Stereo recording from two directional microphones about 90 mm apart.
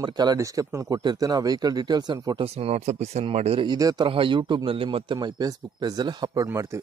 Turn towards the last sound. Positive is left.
turn(degrees=-50)  # may be behind; listen again after turning